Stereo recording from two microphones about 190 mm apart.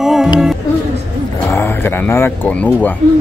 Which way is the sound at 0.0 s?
Centre (ahead or behind).